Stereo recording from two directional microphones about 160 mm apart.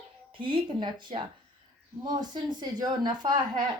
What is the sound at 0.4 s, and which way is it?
Speech, 30° right (ahead or behind).